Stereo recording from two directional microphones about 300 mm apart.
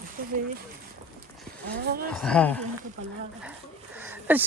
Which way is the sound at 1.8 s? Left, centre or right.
Right.